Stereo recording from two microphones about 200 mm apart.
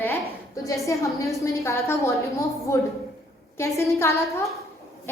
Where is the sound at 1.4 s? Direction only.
15° left (ahead or behind).